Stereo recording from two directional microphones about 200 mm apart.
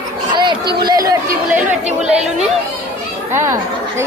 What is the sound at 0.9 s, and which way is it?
Speech, 15° right (ahead or behind).